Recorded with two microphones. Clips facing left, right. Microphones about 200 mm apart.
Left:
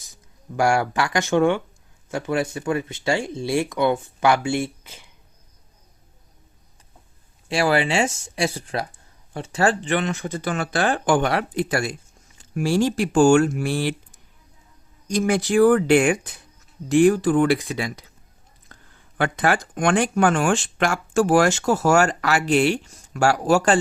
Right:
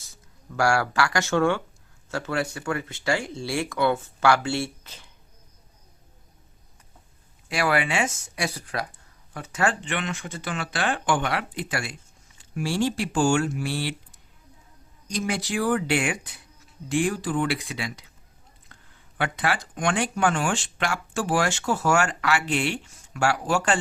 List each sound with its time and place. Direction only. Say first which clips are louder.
0.0 s speech: left 2 dB; 20° left (ahead or behind)
7.4 s speech: left 4 dB; 30° left (ahead or behind); by 13.9 s 50° left (ahead or behind)
15.2 s speech: left 10 dB; 50° left (ahead or behind)